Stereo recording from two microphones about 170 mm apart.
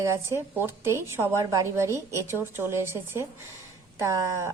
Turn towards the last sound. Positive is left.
turn(degrees=-20)  # may be behind; listen again after turning